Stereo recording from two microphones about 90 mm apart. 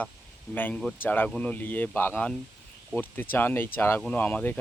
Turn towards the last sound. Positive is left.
turn(degrees=20)  # may be behind; listen again after turning